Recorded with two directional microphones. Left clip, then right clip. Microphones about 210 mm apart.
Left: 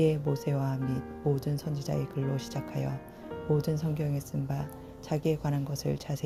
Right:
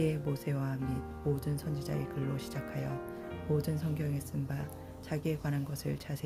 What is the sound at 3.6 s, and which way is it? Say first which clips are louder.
Speech: left 4 dB; 15° left (ahead or behind).